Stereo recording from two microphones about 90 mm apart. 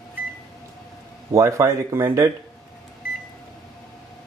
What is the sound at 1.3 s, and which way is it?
Speech, 35° right (ahead or behind).